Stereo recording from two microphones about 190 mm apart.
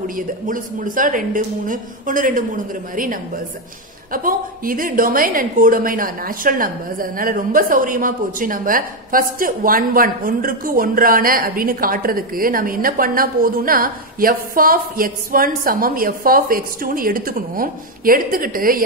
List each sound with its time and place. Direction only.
0.0 s a woman's voice: 45° right (ahead or behind)